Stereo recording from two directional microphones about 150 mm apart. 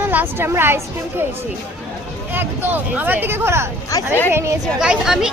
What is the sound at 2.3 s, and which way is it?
Speech, 15° right (ahead or behind).